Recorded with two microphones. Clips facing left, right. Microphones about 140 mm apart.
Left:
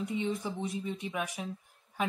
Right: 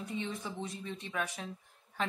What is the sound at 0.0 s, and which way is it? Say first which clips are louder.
Speech: left 6 dB; 15° left (ahead or behind).